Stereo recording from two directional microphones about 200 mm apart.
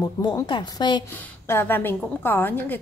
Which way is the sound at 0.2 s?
20° left (ahead or behind).